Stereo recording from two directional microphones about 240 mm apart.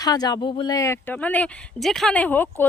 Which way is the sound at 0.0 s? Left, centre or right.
Centre.